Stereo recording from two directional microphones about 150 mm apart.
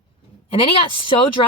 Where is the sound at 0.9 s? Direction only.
35° left (ahead or behind).